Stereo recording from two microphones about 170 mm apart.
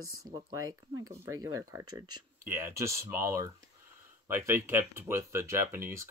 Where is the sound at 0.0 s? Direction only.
20° right (ahead or behind).